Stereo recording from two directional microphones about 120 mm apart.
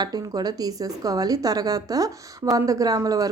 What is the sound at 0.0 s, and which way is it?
A woman's voice, 35° right (ahead or behind).